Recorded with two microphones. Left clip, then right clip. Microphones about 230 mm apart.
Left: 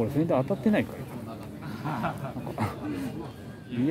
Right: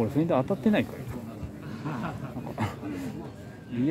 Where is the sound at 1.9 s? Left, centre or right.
Left.